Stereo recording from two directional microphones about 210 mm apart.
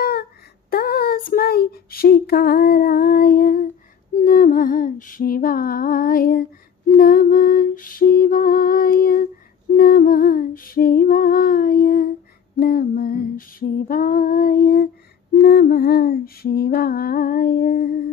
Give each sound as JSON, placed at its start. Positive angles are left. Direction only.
{"t": 0.7, "sound": "child singing", "side_deg": 45}
{"t": 4.2, "sound": "lullaby", "side_deg": 40}
{"t": 7.0, "sound": "female singing", "side_deg": 45}